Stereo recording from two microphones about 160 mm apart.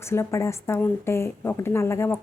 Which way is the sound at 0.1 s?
15° left (ahead or behind).